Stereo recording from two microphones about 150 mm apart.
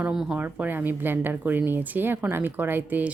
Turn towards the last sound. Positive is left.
turn(degrees=-10)  # may be behind; listen again after turning